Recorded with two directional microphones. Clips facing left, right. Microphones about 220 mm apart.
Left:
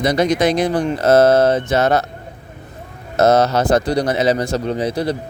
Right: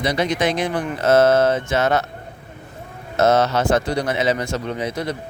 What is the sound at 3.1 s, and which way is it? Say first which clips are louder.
Speech: left 3 dB; 40° left (ahead or behind).